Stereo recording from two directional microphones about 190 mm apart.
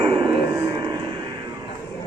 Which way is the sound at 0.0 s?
25° right (ahead or behind).